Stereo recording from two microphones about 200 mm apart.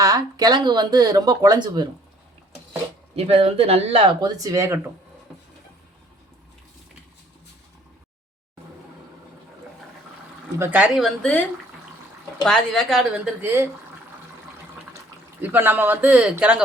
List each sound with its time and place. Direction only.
0.0 s speech: 15° right (ahead or behind)
3.2 s speech: 30° right (ahead or behind); by 4.9 s 15° right (ahead or behind)
10.6 s a woman's voice: 10° right (ahead or behind)
12.5 s a woman's voice: centre (ahead or behind)
14.9 s speech: 10° right (ahead or behind)